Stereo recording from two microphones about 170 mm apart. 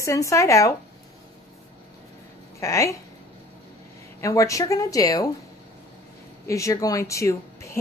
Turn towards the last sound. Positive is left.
turn(degrees=15)  # may be behind; listen again after turning